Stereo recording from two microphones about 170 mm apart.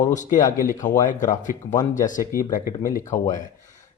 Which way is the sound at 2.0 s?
50° left (ahead or behind).